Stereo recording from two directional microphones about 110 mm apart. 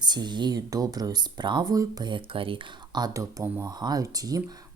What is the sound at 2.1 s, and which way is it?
Speech, 50° right (ahead or behind).